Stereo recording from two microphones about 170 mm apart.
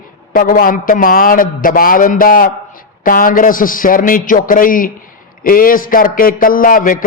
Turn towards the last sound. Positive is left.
turn(degrees=55)  # may be behind; listen again after turning